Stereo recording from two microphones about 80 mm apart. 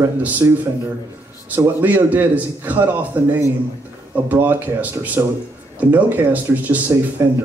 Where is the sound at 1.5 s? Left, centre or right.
Right.